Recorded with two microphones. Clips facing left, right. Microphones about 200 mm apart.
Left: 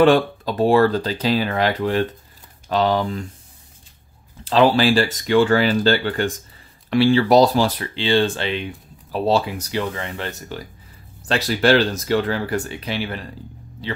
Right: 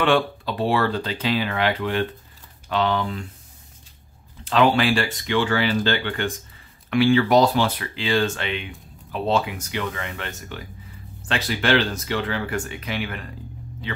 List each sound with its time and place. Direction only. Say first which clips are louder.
0.0 s speech: left 6 dB; 40° left (ahead or behind)
4.5 s speech: left 3 dB; 35° left (ahead or behind)